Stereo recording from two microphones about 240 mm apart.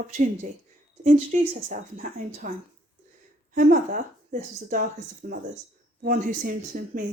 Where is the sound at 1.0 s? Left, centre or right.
Right.